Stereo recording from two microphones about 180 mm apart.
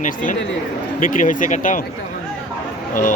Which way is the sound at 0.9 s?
45° left (ahead or behind).